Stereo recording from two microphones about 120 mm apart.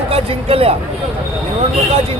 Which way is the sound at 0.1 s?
55° right (ahead or behind).